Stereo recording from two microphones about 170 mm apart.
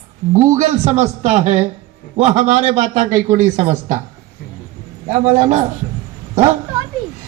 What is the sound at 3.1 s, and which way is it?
Speech, 15° right (ahead or behind).